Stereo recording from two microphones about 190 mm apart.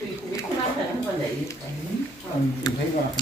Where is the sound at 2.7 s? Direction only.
20° left (ahead or behind).